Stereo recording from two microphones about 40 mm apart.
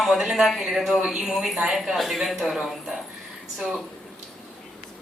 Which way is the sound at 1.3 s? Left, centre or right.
Centre.